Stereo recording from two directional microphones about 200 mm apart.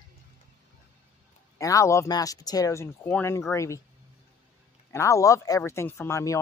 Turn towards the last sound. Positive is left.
turn(degrees=15)  # may be behind; listen again after turning